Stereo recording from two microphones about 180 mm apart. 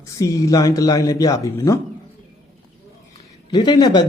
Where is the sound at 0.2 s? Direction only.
20° left (ahead or behind).